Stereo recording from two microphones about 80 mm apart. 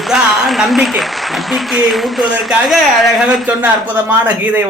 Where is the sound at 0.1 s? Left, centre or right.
Centre.